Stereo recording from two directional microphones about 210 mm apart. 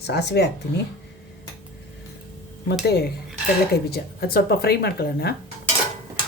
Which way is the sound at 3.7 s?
50° left (ahead or behind).